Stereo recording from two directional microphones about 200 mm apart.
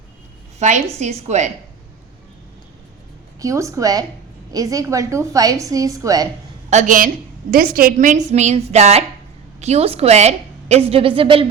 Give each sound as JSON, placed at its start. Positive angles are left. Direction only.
{"t": 0.6, "sound": "a woman's voice", "side_deg": -35}
{"t": 3.4, "sound": "a woman's voice", "side_deg": -15}
{"t": 6.7, "sound": "a woman's voice", "side_deg": -40}